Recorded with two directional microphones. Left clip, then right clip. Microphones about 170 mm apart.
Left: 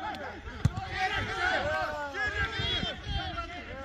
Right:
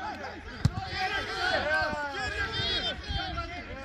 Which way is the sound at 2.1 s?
20° right (ahead or behind).